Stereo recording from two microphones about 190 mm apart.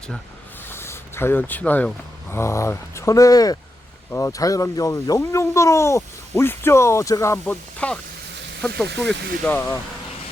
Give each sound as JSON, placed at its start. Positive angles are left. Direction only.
{"t": 0.7, "sound": "a sound", "side_deg": 10}
{"t": 2.3, "sound": "speech", "side_deg": 15}
{"t": 8.9, "sound": "speech", "side_deg": -65}
{"t": 9.4, "sound": "speech", "side_deg": 10}